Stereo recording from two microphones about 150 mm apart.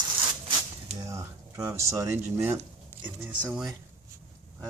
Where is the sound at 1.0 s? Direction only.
20° right (ahead or behind).